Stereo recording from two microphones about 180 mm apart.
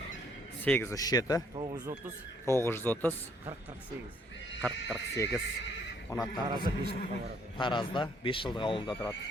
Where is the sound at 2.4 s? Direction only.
15° left (ahead or behind).